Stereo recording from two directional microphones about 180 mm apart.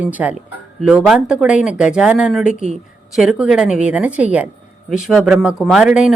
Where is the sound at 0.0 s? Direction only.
10° right (ahead or behind).